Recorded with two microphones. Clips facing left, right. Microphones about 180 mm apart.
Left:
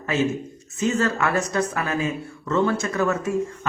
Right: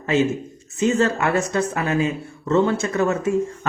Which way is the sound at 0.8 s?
25° right (ahead or behind).